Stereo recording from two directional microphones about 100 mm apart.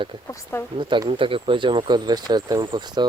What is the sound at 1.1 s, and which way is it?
Speech, 60° right (ahead or behind).